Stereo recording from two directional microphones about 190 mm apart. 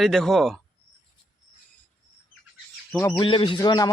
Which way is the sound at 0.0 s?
Centre (ahead or behind).